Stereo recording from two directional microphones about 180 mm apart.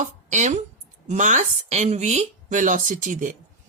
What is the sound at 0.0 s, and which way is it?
A woman's voice, 40° right (ahead or behind).